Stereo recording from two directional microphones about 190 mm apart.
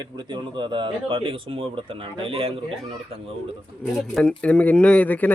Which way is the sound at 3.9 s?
Centre (ahead or behind).